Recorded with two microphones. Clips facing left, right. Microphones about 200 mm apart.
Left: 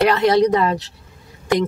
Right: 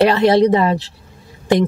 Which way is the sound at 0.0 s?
30° right (ahead or behind).